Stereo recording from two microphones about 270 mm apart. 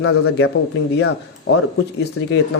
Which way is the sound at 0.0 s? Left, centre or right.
Left.